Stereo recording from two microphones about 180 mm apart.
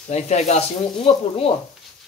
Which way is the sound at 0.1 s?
40° left (ahead or behind).